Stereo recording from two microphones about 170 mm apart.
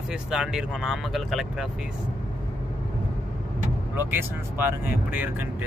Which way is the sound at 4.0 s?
10° right (ahead or behind).